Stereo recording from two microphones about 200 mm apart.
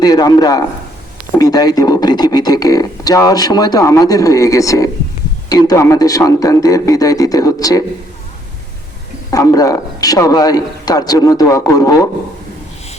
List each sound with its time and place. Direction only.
0.0 s a man's voice: 20° left (ahead or behind)
9.3 s a man's voice: 15° left (ahead or behind)